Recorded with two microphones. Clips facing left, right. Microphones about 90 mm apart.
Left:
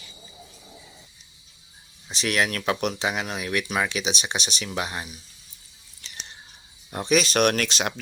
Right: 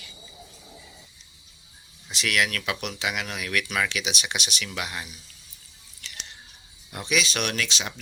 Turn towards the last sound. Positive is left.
turn(degrees=50)  # may be behind; listen again after turning